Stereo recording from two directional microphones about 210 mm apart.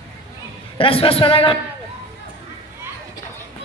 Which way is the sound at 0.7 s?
25° left (ahead or behind).